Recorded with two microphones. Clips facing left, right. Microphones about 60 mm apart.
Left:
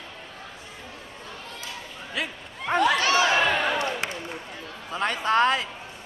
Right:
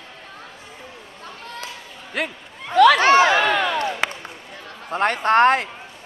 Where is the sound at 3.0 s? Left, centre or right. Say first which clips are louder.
Right 7 dB; right.